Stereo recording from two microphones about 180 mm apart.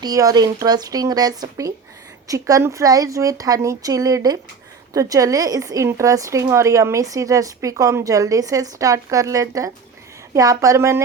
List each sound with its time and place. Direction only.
0.0 s a woman's voice: 20° right (ahead or behind)